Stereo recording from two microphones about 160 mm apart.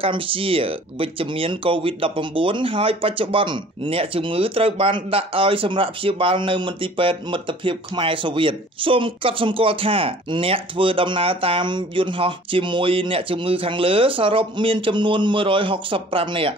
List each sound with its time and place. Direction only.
0.0 s speech: 35° right (ahead or behind)